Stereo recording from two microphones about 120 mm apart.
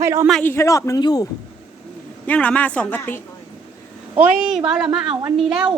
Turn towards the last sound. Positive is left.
turn(degrees=-5)  # may be behind; listen again after turning